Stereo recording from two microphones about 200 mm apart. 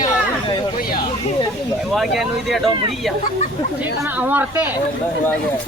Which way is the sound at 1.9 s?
Centre (ahead or behind).